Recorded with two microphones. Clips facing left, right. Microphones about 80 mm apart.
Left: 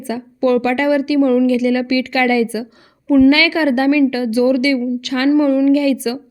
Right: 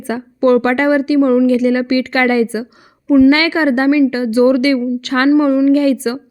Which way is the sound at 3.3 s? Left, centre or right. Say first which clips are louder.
Right 1 dB; right.